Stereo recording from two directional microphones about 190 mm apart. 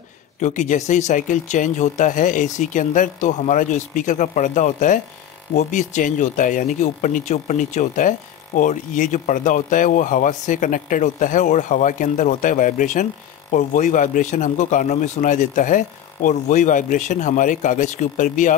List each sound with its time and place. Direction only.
0.4 s speech: 40° left (ahead or behind)